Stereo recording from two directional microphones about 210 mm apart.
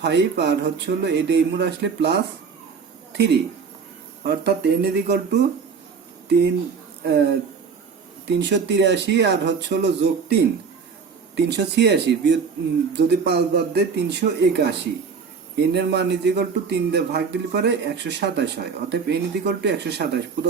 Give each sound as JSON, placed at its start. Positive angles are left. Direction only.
{"t": 0.0, "sound": "speech", "side_deg": -55}
{"t": 4.2, "sound": "a man's voice", "side_deg": -50}